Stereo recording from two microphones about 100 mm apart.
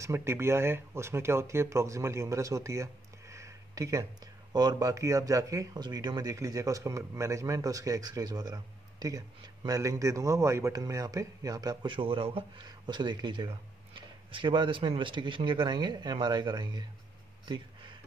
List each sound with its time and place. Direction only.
0.0 s speech: 25° right (ahead or behind)
5.8 s speech: 45° right (ahead or behind)
6.3 s speech: 35° right (ahead or behind); by 12.6 s 65° right (ahead or behind)
12.6 s speech: 45° right (ahead or behind)